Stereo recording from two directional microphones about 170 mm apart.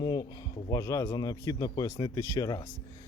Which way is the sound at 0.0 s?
25° left (ahead or behind).